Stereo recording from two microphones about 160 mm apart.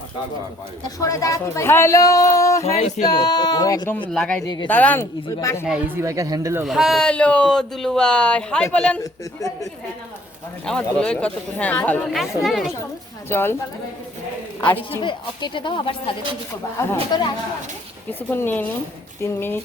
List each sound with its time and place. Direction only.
0.9 s speech: 20° left (ahead or behind)
2.7 s male singing: 45° left (ahead or behind)
3.0 s speech: 25° left (ahead or behind)
4.1 s speech: 5° left (ahead or behind)
4.4 s speech: 25° left (ahead or behind)
4.7 s speech: 10° left (ahead or behind)
5.6 s speech: 10° right (ahead or behind)
6.7 s speech: centre (ahead or behind)
10.7 s speech: 5° left (ahead or behind)
13.3 s speech: 15° left (ahead or behind)
15.0 s speech: 30° left (ahead or behind)
18.3 s speech: 10° left (ahead or behind)